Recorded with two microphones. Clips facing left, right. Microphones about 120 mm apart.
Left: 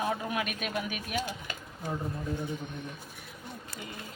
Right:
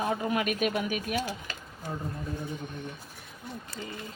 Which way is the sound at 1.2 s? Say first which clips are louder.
Right 2 dB; 20° left (ahead or behind).